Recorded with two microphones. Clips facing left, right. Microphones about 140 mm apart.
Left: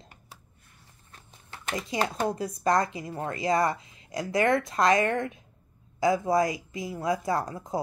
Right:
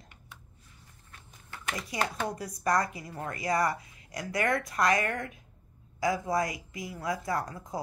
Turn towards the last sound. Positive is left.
turn(degrees=25)  # may be behind; listen again after turning